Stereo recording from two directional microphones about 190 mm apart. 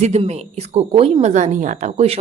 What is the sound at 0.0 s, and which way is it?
Speech, 35° right (ahead or behind).